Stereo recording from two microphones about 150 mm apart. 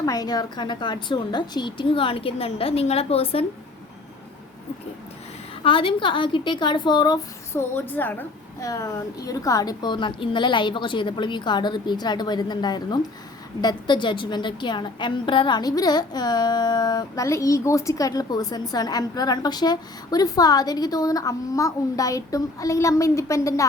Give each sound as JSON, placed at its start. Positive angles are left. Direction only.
{"t": 0.0, "sound": "a woman's voice", "side_deg": 25}
{"t": 5.6, "sound": "a woman's voice", "side_deg": 35}
{"t": 7.8, "sound": "a woman's voice", "side_deg": 10}
{"t": 8.6, "sound": "a woman's voice", "side_deg": 25}